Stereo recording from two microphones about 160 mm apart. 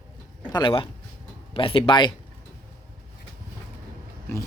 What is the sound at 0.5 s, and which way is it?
Speech, 30° left (ahead or behind).